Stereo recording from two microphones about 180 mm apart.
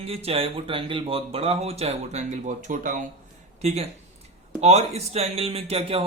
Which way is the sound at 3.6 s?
35° right (ahead or behind).